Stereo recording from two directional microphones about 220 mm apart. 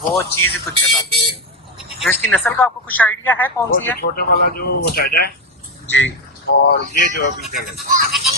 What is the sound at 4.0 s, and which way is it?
Speech, 45° left (ahead or behind).